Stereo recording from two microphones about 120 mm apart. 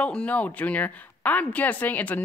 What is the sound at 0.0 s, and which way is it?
A woman's voice, 10° left (ahead or behind).